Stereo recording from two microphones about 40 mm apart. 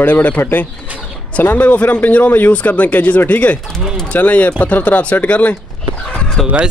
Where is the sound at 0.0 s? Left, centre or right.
Left.